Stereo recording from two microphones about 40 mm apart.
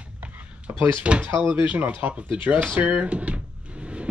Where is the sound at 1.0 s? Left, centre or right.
Right.